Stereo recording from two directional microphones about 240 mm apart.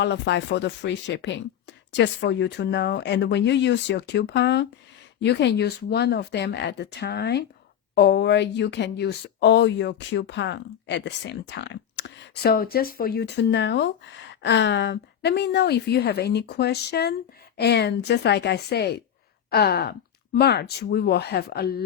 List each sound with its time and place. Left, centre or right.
0.0 s speech: left